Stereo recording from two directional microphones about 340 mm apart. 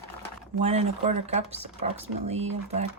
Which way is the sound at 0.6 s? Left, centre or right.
Centre.